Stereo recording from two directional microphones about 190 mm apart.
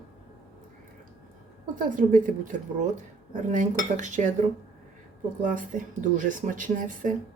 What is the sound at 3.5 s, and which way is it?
Cutlery, 40° right (ahead or behind).